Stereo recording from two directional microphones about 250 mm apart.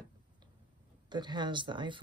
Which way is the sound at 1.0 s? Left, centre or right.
Centre.